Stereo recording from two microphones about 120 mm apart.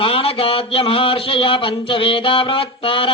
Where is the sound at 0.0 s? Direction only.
50° left (ahead or behind).